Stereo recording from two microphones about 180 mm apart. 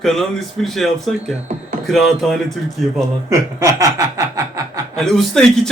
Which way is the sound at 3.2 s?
15° right (ahead or behind).